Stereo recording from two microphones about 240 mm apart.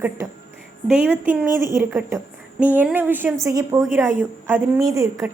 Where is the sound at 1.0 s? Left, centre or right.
Centre.